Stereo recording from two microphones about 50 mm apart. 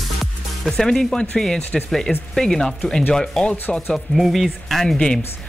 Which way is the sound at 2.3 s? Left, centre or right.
Centre.